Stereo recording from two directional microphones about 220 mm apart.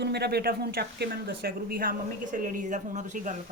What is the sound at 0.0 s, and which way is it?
Speech, 50° right (ahead or behind).